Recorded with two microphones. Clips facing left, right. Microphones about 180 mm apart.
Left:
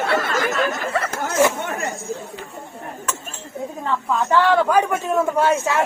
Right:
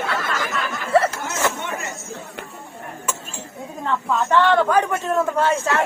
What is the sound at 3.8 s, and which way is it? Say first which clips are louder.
A man's voice: right 1 dB; centre (ahead or behind).